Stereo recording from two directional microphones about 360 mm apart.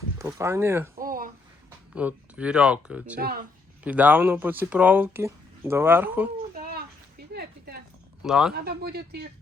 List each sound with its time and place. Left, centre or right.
0.2 s speech: centre
1.0 s a sound: right
2.0 s speech: centre
3.2 s speech: right
3.8 s speech: centre
6.6 s a sound: right
8.2 s speech: centre
8.5 s speech: right